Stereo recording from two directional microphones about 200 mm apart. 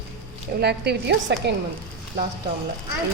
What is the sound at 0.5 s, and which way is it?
Speech, 55° right (ahead or behind).